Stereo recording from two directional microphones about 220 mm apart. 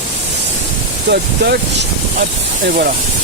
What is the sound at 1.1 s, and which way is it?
Speech, 45° right (ahead or behind).